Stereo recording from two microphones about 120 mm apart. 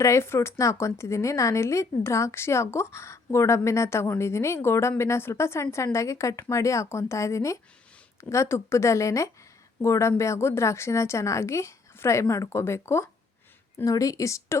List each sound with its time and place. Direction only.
0.0 s speech: 25° left (ahead or behind)